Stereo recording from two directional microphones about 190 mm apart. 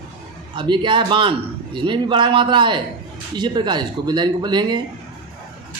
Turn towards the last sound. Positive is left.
turn(degrees=-25)  # may be behind; listen again after turning